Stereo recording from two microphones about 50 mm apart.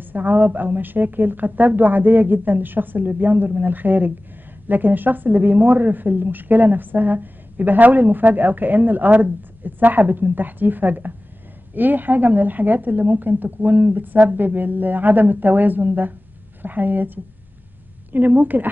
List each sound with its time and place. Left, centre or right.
0.0 s a woman's voice: right